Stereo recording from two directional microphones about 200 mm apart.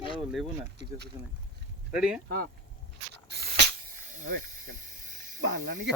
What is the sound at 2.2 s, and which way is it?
Speech, 45° right (ahead or behind).